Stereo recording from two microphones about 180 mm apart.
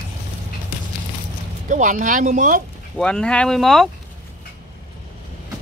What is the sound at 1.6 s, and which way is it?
Speech, 45° right (ahead or behind).